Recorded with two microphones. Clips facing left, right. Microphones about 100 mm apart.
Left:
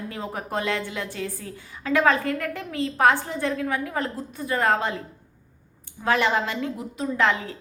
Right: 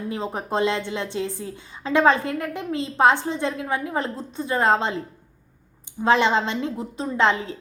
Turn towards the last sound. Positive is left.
turn(degrees=-25)  # may be behind; listen again after turning